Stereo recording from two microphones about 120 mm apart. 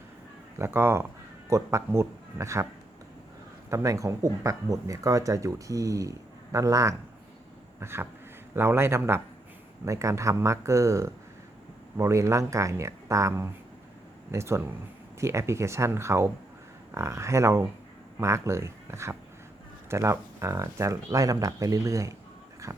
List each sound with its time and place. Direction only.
0.6 s speech: 20° right (ahead or behind)
3.7 s speech: 25° right (ahead or behind)